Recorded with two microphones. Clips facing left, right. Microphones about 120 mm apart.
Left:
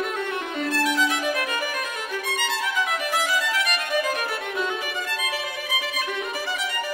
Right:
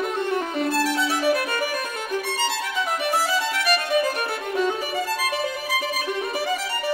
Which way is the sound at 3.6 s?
35° right (ahead or behind).